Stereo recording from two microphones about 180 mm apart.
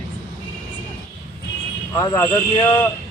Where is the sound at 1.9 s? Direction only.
20° left (ahead or behind).